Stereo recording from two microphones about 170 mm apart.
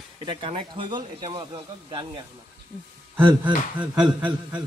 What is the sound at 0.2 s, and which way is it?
Speech, 30° right (ahead or behind).